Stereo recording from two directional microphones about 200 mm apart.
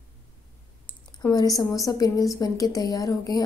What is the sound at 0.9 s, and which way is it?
Speech, 20° left (ahead or behind).